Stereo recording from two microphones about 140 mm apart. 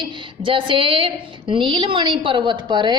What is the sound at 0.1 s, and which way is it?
A woman's voice, 35° right (ahead or behind).